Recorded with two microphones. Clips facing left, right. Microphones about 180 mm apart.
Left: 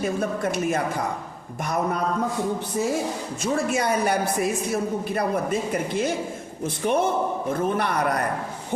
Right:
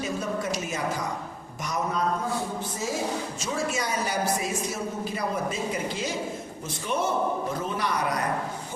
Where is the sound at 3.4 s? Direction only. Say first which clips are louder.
Left 8 dB; 55° left (ahead or behind).